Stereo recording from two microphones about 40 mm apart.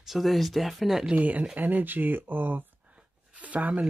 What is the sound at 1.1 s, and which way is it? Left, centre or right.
Speech, right.